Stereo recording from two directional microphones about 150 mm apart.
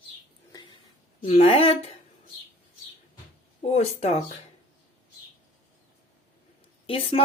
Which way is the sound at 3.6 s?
45° left (ahead or behind).